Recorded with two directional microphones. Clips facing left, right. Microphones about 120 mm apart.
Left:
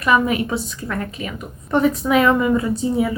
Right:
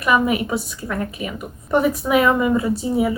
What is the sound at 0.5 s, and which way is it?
A woman's voice, 10° right (ahead or behind).